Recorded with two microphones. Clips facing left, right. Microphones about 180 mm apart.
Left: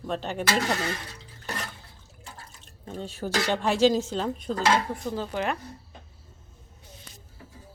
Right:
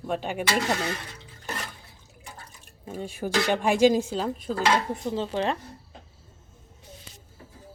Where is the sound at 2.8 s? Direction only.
10° right (ahead or behind).